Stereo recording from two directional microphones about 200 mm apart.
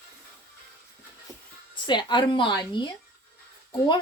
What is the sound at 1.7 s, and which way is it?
Speech, 25° left (ahead or behind).